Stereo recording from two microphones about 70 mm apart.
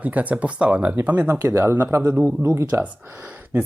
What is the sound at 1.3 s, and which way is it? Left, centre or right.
Speech, right.